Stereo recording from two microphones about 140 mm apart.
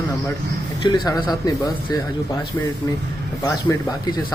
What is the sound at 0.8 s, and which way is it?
Speech, 30° left (ahead or behind).